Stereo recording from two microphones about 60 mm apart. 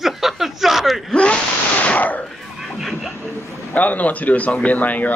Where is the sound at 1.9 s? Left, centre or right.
Left.